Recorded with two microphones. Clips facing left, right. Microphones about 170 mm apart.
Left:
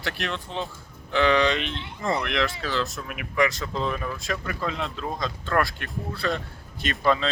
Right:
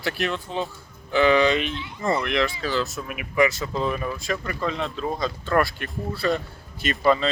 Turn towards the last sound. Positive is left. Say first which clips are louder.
# right 3 dB
turn(degrees=-5)  # may be behind; listen again after turning